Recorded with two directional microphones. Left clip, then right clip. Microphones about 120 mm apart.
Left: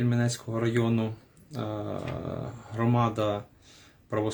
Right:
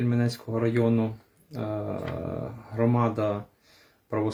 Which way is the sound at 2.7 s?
20° left (ahead or behind).